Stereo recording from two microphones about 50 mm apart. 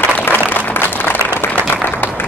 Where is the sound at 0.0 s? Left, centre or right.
Left.